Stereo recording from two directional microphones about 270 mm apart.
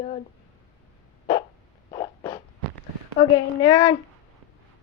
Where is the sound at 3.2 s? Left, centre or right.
Centre.